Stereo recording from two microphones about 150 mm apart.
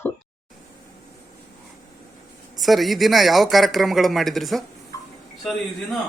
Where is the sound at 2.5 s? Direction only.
Centre (ahead or behind).